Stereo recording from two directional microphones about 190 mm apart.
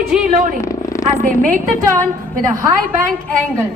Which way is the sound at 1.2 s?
45° right (ahead or behind).